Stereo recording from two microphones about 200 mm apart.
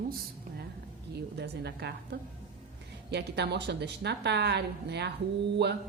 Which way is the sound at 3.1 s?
55° right (ahead or behind).